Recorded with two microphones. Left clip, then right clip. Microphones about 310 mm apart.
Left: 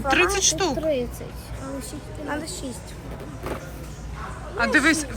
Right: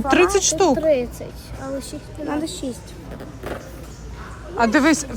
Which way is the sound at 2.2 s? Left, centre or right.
Right.